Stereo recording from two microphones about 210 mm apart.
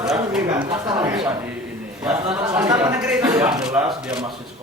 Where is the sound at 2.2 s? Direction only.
15° right (ahead or behind).